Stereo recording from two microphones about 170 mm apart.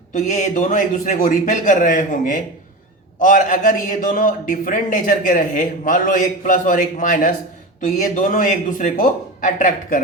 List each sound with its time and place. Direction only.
0.1 s a man's voice: 45° left (ahead or behind)